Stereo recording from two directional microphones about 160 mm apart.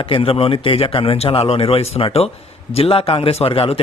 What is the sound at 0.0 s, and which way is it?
Speech, 35° left (ahead or behind).